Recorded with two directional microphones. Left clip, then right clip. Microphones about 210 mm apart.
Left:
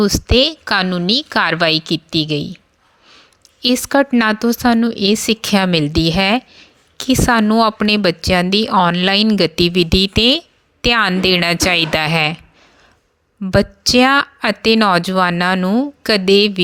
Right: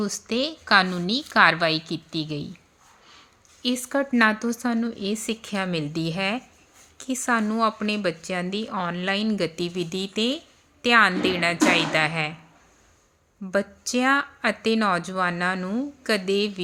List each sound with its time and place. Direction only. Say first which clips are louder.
0.0 s a woman's voice: left 13 dB; 40° left (ahead or behind)
3.6 s speech: left 11 dB; 45° left (ahead or behind)
13.4 s speech: left 10 dB; 45° left (ahead or behind)